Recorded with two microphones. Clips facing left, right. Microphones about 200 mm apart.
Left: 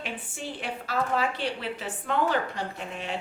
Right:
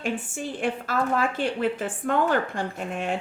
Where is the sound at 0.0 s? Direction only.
45° right (ahead or behind).